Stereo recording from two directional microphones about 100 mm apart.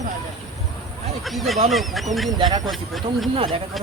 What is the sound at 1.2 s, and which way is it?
Speech, centre (ahead or behind).